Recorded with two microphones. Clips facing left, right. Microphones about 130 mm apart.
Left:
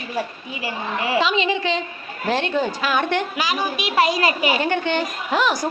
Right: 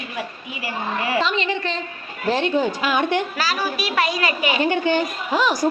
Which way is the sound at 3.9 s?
30° left (ahead or behind).